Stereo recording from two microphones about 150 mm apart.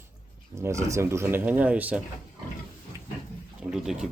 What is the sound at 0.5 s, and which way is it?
Speech, 20° right (ahead or behind).